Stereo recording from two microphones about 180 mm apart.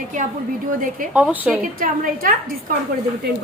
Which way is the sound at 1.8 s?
50° right (ahead or behind).